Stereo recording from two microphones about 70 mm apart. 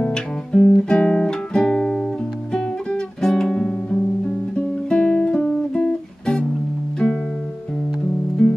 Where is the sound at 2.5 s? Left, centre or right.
Centre.